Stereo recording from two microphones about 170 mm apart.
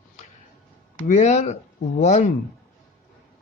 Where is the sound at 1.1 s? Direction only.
45° left (ahead or behind).